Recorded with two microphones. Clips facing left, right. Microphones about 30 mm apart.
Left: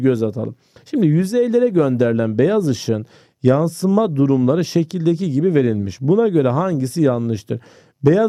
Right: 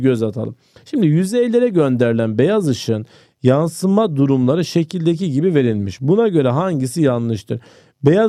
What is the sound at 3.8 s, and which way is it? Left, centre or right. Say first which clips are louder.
Speech: even; centre.